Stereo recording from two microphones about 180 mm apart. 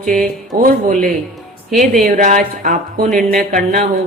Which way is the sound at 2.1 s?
45° right (ahead or behind).